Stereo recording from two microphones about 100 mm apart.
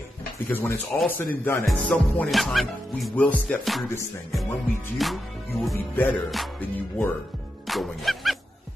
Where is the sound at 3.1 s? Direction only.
15° left (ahead or behind).